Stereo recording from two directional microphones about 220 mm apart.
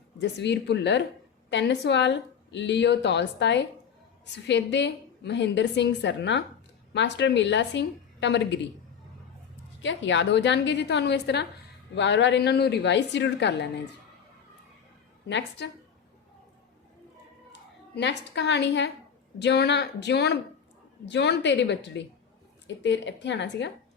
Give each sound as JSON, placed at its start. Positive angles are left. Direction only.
{"t": 0.2, "sound": "a woman's voice", "side_deg": 50}
{"t": 9.8, "sound": "a woman's voice", "side_deg": 55}
{"t": 15.3, "sound": "a woman's voice", "side_deg": 55}
{"t": 17.9, "sound": "a woman's voice", "side_deg": 55}